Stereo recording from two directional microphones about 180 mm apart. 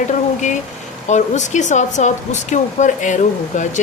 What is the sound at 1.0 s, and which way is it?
Speech, 40° left (ahead or behind).